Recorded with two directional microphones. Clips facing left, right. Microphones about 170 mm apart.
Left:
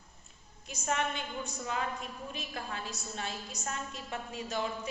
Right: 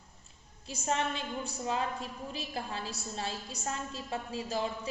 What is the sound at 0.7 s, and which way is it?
A woman's voice, 30° right (ahead or behind).